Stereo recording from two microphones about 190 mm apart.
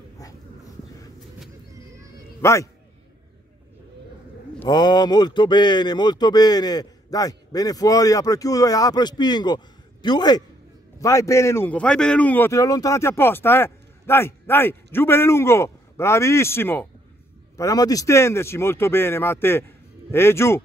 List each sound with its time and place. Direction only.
0.2 s dog: 20° left (ahead or behind)
2.4 s a man's voice: 15° left (ahead or behind)
4.6 s a man's voice: 20° left (ahead or behind)